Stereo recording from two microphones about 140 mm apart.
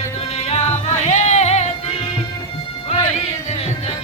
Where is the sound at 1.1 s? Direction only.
55° left (ahead or behind).